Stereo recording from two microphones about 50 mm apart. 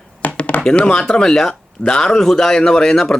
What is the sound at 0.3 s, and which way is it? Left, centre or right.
Chopping, left.